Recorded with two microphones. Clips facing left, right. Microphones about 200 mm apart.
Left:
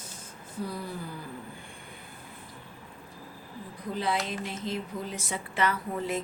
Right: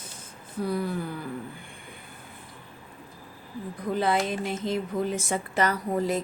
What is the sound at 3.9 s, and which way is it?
A woman's voice, 50° right (ahead or behind).